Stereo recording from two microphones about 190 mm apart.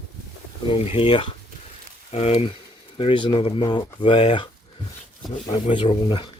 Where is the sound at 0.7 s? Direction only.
25° left (ahead or behind).